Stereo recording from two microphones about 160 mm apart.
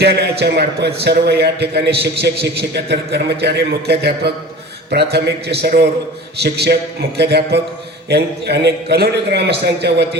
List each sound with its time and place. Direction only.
0.0 s a man's voice: 90° right